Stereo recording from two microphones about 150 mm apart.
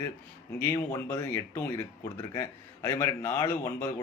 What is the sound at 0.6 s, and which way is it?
Speech, 15° left (ahead or behind).